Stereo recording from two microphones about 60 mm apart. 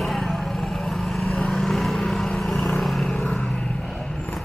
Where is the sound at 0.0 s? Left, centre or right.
Centre.